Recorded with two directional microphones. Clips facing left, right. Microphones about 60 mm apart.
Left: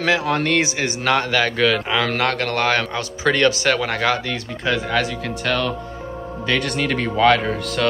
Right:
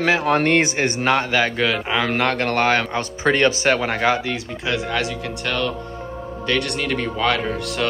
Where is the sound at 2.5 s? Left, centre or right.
Right.